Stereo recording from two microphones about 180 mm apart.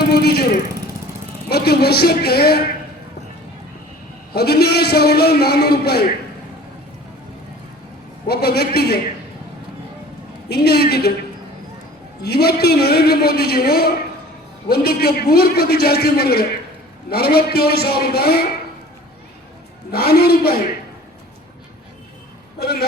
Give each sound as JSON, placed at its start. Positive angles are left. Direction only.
{"t": 0.1, "sound": "a man's voice", "side_deg": 60}
{"t": 1.5, "sound": "a man's voice", "side_deg": 60}
{"t": 4.4, "sound": "a man's voice", "side_deg": 60}
{"t": 8.3, "sound": "a man's voice", "side_deg": 60}
{"t": 10.5, "sound": "a man's voice", "side_deg": 60}
{"t": 12.2, "sound": "a man's voice", "side_deg": 60}
{"t": 19.9, "sound": "a man's voice", "side_deg": 60}
{"t": 22.5, "sound": "a man's voice", "side_deg": 60}